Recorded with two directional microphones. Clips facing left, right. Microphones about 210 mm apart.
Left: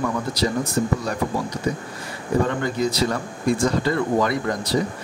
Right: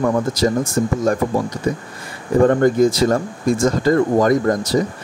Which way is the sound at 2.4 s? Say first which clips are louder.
Right 10 dB; 50° right (ahead or behind).